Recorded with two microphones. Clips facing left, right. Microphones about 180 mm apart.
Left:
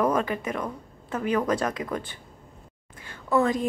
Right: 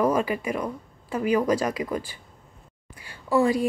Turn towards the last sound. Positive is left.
turn(degrees=-10)  # may be behind; listen again after turning